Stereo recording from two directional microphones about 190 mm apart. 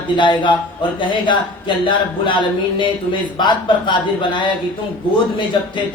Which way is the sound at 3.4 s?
25° left (ahead or behind).